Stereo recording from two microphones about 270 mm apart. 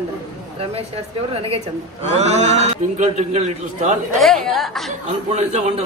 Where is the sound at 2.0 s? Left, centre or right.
Right.